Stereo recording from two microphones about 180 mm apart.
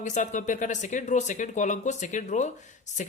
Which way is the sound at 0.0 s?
45° left (ahead or behind).